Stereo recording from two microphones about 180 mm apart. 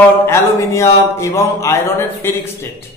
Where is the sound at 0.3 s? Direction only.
15° left (ahead or behind).